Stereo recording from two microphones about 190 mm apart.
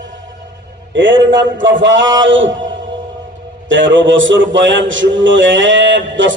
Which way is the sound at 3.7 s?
75° right (ahead or behind).